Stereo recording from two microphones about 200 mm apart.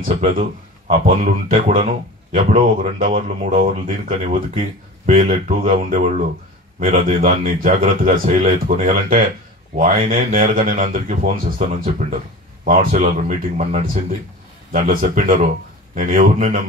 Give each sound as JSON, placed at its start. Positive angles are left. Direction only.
{"t": 0.0, "sound": "speech", "side_deg": -40}